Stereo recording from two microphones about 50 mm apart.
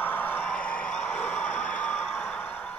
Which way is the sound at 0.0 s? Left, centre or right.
Left.